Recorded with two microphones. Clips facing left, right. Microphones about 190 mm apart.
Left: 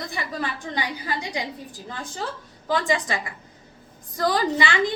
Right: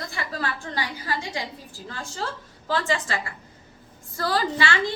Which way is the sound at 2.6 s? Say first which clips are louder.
Left 2 dB; 15° left (ahead or behind).